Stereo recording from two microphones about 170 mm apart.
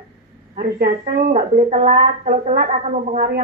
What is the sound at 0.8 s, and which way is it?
A woman's voice, 50° right (ahead or behind).